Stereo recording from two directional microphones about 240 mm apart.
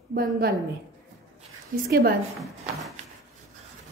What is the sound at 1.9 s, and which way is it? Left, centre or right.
Speech, right.